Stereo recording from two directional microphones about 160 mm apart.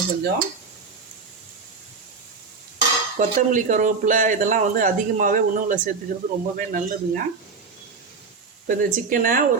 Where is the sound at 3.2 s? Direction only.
55° right (ahead or behind).